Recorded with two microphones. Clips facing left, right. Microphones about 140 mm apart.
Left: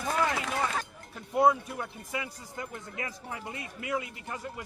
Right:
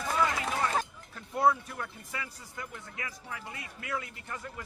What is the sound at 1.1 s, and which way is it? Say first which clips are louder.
Speech: left 3 dB; 15° left (ahead or behind).